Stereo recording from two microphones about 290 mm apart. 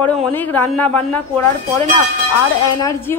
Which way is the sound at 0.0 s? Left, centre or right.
Centre.